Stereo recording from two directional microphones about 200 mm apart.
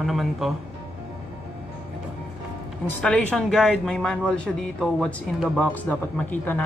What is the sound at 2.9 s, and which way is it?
Speech, 5° left (ahead or behind).